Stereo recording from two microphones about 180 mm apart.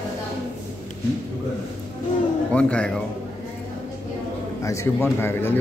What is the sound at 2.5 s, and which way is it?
Speech, 5° left (ahead or behind).